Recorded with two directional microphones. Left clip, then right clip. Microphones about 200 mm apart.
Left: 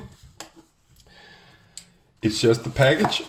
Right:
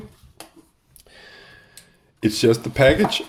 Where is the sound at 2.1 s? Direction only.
35° right (ahead or behind).